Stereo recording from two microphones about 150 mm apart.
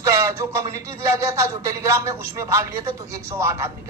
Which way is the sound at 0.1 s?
20° right (ahead or behind).